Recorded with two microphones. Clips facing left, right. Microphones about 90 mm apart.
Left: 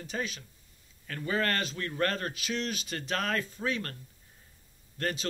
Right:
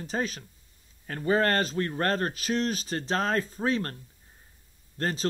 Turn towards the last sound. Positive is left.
turn(degrees=-35)  # may be behind; listen again after turning